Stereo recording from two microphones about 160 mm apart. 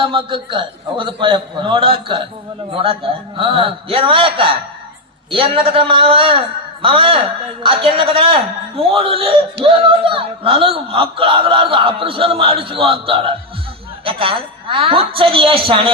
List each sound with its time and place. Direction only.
0.0 s speech: 30° right (ahead or behind)